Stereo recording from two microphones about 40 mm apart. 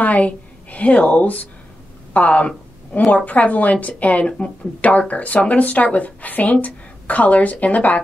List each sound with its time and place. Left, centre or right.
0.0 s a woman's voice: left